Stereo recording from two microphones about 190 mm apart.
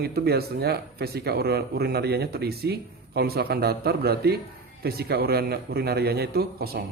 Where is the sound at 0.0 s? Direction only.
55° right (ahead or behind).